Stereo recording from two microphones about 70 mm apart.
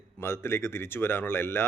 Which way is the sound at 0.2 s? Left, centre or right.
Left.